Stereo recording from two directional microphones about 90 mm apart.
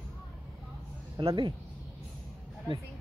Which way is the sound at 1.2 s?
65° right (ahead or behind).